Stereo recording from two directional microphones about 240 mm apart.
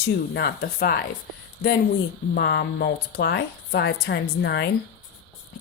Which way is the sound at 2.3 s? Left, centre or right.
Left.